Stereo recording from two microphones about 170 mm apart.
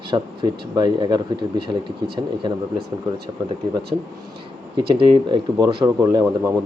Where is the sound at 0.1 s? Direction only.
25° right (ahead or behind).